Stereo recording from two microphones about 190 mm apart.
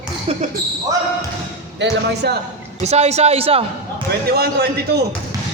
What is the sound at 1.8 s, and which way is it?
Speech, 65° right (ahead or behind).